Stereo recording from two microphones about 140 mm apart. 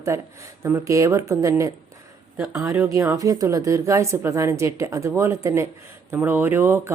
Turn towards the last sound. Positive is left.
turn(degrees=-15)  # may be behind; listen again after turning